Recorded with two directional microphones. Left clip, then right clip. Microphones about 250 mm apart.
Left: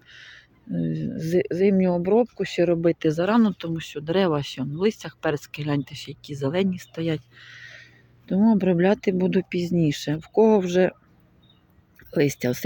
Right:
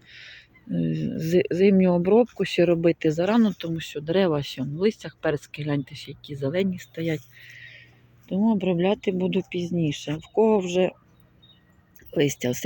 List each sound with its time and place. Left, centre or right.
0.1 s speech: centre
7.6 s a sound: left
8.3 s speech: centre
9.4 s speech: left
9.7 s speech: left
11.9 s speech: centre